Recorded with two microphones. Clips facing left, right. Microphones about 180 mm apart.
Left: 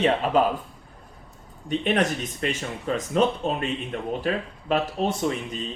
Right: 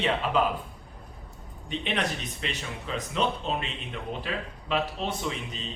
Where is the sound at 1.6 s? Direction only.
45° left (ahead or behind).